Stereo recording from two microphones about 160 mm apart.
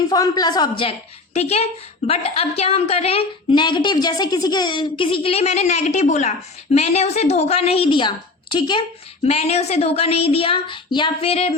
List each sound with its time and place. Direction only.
0.1 s a woman's voice: 25° left (ahead or behind)
9.2 s a woman's voice: 40° left (ahead or behind)